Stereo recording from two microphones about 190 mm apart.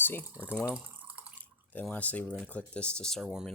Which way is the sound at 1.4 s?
10° left (ahead or behind).